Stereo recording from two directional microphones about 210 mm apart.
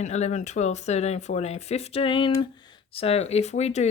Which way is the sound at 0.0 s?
35° left (ahead or behind).